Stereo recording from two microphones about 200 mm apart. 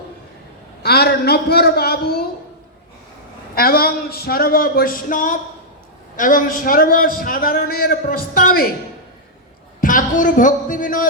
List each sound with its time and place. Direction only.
0.8 s a man's voice: 50° left (ahead or behind)
3.5 s a man's voice: 50° left (ahead or behind)
9.8 s a woman's voice: 40° left (ahead or behind)